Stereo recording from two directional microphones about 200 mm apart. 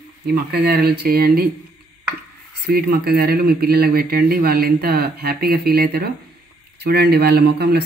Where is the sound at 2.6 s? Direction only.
50° right (ahead or behind).